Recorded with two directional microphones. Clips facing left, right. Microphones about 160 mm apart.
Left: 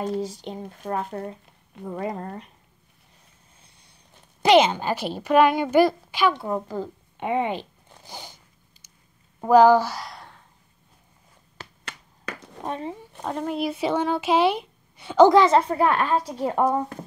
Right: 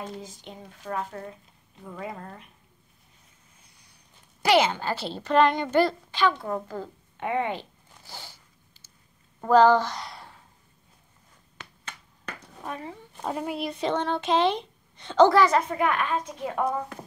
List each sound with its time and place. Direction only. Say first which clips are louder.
0.2 s a woman's voice: left 11 dB; 35° left (ahead or behind)
0.6 s speech: left 3 dB; 50° left (ahead or behind)
0.9 s a woman's voice: left 3 dB; 35° left (ahead or behind)
4.4 s a woman's voice: left 5 dB; 20° left (ahead or behind)
9.4 s speech: left 3 dB; 10° left (ahead or behind)
12.6 s speech: left 5 dB; 25° left (ahead or behind)
13.2 s speech: left 3 dB; 5° right (ahead or behind)
13.7 s a woman's voice: left 3 dB; 10° left (ahead or behind)
15.7 s a woman's voice: left 5 dB; 35° left (ahead or behind)